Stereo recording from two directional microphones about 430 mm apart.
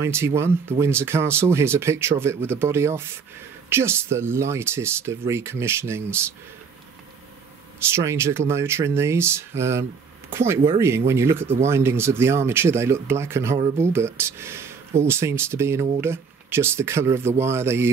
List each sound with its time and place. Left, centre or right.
0.0 s speech: centre
7.9 s speech: centre